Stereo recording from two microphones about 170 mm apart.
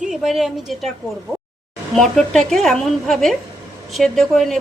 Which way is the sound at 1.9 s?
5° left (ahead or behind).